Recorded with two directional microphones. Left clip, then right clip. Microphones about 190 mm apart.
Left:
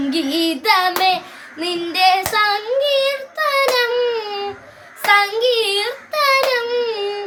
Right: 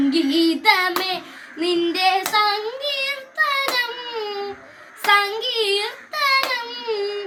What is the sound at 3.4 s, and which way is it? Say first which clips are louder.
Baby cry: left 4 dB; 15° left (ahead or behind).